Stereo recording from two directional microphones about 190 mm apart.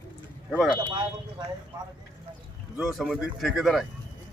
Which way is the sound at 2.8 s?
Centre (ahead or behind).